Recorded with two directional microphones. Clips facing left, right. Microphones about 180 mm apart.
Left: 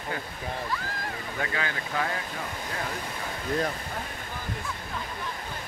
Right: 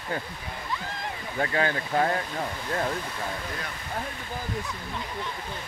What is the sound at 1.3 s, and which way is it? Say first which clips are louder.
Speech: right 7 dB; 35° right (ahead or behind).